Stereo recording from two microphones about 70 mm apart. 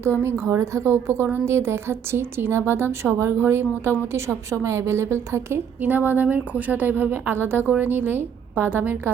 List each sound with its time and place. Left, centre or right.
0.4 s a woman's voice: right
5.8 s a woman's voice: right